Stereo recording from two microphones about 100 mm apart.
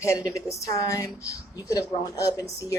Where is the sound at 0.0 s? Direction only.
30° left (ahead or behind).